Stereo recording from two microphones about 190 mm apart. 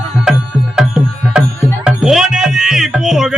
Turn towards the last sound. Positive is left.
turn(degrees=-5)  # may be behind; listen again after turning